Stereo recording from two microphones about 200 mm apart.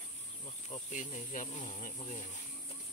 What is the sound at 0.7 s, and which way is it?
Speech, 35° left (ahead or behind).